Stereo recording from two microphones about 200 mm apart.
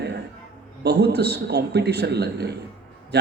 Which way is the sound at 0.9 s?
55° right (ahead or behind).